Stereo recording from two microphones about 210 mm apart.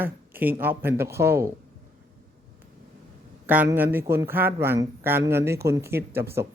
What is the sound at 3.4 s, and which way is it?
Speech, 10° right (ahead or behind).